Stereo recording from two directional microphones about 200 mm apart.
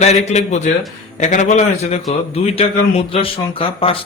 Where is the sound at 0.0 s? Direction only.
35° left (ahead or behind).